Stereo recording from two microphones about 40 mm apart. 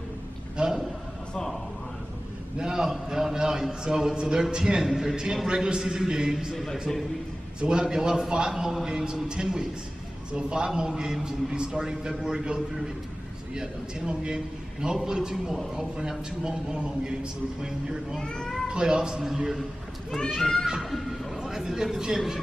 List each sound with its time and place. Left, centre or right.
0.6 s a sound: right
2.6 s a man's voice: centre
4.8 s a man's voice: centre
6.5 s speech: centre
7.6 s a man's voice: centre
18.2 s speech: left
18.7 s a man's voice: right
20.9 s speech: centre
21.4 s a man's voice: centre